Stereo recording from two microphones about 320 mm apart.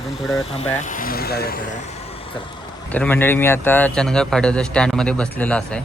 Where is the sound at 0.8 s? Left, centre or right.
Left.